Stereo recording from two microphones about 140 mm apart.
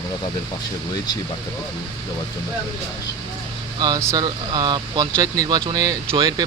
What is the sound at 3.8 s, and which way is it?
Speech, 25° right (ahead or behind).